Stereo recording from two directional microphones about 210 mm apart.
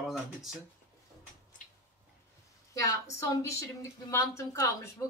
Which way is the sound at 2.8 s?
15° left (ahead or behind).